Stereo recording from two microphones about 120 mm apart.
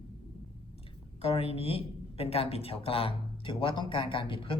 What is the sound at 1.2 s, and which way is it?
Speech, 55° left (ahead or behind).